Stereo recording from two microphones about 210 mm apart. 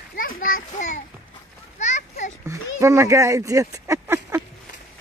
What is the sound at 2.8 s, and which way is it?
Speech, 15° right (ahead or behind).